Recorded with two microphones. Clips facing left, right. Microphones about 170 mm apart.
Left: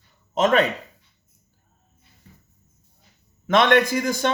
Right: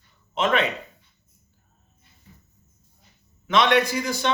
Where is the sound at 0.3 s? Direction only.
40° left (ahead or behind).